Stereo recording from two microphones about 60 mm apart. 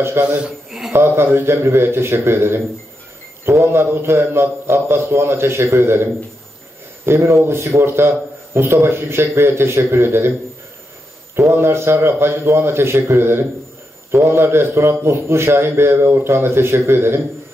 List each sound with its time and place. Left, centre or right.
0.2 s a man's voice: right
0.7 s a man's voice: centre
0.9 s a man's voice: right
3.6 s a man's voice: right
7.1 s a man's voice: right
11.5 s a man's voice: right